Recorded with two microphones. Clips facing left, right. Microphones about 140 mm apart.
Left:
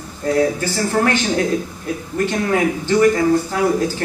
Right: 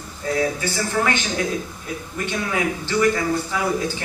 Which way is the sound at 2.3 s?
45° left (ahead or behind).